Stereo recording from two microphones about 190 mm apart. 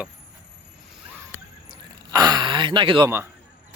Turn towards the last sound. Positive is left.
turn(degrees=-25)  # may be behind; listen again after turning